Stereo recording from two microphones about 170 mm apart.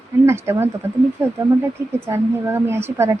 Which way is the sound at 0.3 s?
15° right (ahead or behind).